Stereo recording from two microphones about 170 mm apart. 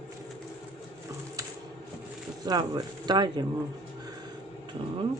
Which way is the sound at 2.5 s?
25° right (ahead or behind).